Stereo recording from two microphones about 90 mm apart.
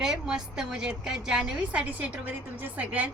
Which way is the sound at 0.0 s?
5° right (ahead or behind).